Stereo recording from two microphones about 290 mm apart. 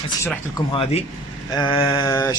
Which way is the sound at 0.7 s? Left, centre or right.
Centre.